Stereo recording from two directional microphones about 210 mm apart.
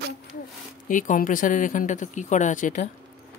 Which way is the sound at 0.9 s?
40° left (ahead or behind).